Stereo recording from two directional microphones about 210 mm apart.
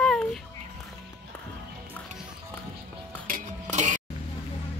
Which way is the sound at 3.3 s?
35° right (ahead or behind).